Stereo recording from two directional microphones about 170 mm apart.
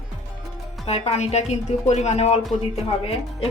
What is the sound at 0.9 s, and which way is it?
Speech, 35° left (ahead or behind).